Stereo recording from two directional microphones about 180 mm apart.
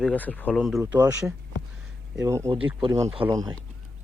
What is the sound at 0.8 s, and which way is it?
Speech, 15° right (ahead or behind).